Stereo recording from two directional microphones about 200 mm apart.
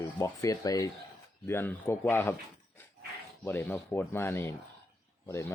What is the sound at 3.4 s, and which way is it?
Speech, 10° left (ahead or behind).